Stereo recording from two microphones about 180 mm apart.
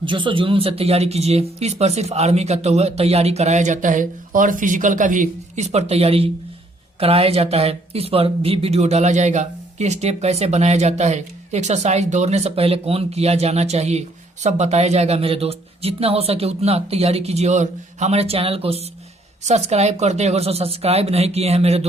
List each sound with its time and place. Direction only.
0.0 s speech: 25° right (ahead or behind)